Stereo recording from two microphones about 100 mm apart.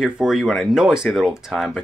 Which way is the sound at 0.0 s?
5° right (ahead or behind).